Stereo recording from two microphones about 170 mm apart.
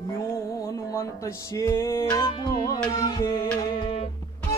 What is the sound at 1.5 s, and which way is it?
Music, 15° left (ahead or behind).